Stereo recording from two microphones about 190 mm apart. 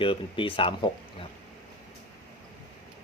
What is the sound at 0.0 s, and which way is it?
Speech, 25° left (ahead or behind).